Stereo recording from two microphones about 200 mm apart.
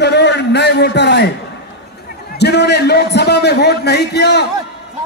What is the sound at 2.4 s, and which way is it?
A man's voice, 55° left (ahead or behind).